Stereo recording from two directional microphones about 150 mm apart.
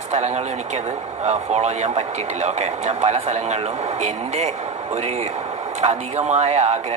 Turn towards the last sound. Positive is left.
turn(degrees=-45)  # may be behind; listen again after turning